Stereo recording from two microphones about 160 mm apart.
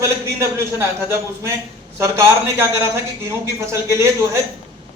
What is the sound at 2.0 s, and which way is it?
A man's voice, 15° right (ahead or behind).